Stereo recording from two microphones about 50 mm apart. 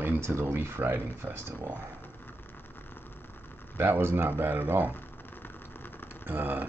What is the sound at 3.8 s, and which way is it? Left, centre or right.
Speech, right.